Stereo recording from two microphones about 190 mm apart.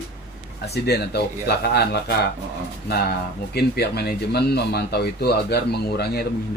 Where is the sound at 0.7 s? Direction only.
60° left (ahead or behind).